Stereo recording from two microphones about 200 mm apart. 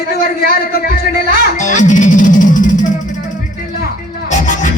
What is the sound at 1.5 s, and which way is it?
Music, 40° left (ahead or behind).